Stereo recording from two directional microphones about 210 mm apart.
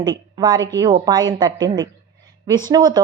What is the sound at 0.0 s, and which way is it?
A woman's voice, 20° right (ahead or behind).